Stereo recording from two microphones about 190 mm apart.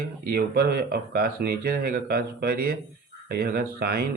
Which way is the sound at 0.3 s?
55° right (ahead or behind).